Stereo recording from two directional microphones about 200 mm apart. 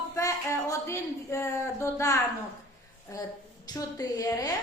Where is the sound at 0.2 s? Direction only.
15° left (ahead or behind).